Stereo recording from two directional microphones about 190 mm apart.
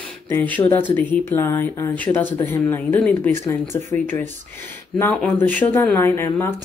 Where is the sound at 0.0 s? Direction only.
10° left (ahead or behind).